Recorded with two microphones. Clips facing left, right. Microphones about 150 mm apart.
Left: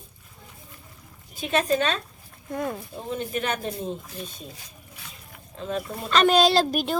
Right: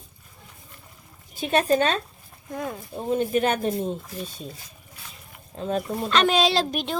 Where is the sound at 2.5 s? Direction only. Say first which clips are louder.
Left 2 dB; centre (ahead or behind).